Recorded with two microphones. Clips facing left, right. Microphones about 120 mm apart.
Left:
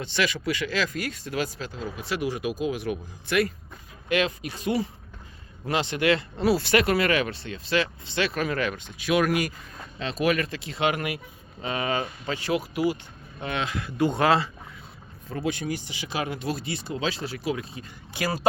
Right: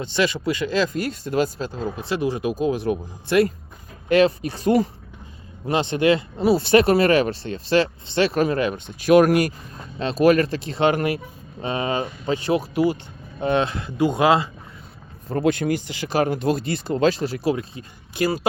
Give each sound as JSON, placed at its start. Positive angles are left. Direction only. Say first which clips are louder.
{"t": 0.0, "sound": "speech", "louder": "right 5 dB", "side_deg": -25}
{"t": 9.0, "sound": "speech", "louder": "right 8 dB", "side_deg": -40}
{"t": 15.4, "sound": "speech", "louder": "right 8 dB", "side_deg": -55}